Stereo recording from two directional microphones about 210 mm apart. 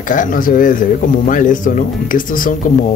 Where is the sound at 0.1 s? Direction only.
40° left (ahead or behind).